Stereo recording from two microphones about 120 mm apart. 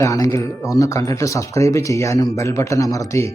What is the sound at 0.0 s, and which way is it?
Speech, 25° left (ahead or behind).